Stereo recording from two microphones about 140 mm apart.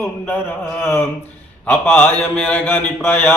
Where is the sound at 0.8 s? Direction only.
15° left (ahead or behind).